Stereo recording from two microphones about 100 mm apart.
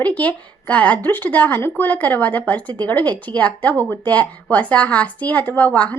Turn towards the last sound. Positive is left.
turn(degrees=15)  # may be behind; listen again after turning